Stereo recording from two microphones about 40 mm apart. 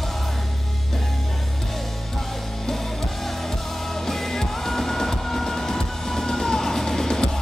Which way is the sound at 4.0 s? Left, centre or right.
Centre.